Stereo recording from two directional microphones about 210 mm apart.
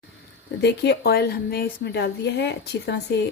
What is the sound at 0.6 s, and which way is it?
A woman's voice, 55° left (ahead or behind).